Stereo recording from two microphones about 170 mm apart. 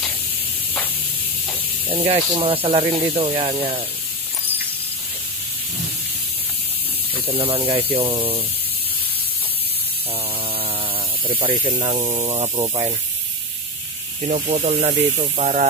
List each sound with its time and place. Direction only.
1.9 s speech: 30° right (ahead or behind)
7.2 s speech: 35° right (ahead or behind)
11.8 s speech: 40° right (ahead or behind)
12.5 s speech: 25° right (ahead or behind)
14.3 s speech: 40° right (ahead or behind)